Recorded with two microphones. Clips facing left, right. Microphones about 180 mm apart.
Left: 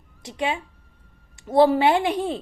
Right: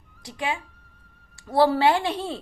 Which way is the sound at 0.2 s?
20° left (ahead or behind).